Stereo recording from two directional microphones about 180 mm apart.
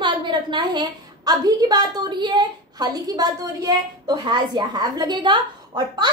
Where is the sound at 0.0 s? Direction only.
25° right (ahead or behind).